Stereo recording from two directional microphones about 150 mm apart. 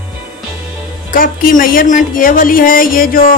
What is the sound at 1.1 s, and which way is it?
Speech, 70° left (ahead or behind).